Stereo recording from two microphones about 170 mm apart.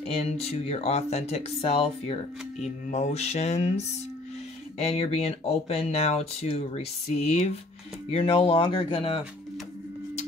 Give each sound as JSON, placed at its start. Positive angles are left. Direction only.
{"t": 0.0, "sound": "speech", "side_deg": 35}